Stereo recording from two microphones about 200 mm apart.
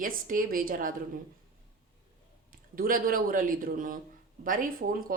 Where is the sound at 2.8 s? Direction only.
45° right (ahead or behind).